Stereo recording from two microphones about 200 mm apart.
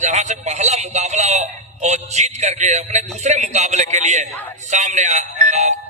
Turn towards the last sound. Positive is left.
turn(degrees=-35)  # may be behind; listen again after turning